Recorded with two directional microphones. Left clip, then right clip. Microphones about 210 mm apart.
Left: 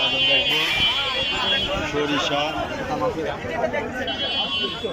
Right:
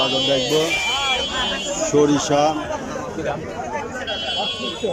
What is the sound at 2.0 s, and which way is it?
Speech, 25° right (ahead or behind).